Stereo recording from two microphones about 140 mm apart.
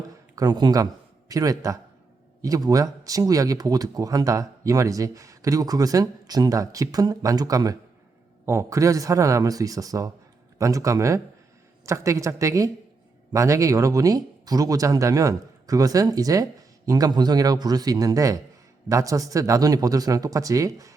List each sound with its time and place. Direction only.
0.3 s speech: 30° right (ahead or behind)